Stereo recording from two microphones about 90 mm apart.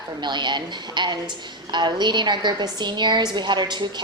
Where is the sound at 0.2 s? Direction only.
55° right (ahead or behind).